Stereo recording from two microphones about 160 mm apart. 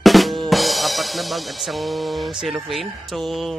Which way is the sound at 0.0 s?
Centre (ahead or behind).